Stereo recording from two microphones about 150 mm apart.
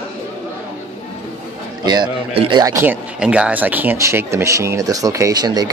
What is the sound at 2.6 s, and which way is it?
Speech, 15° right (ahead or behind).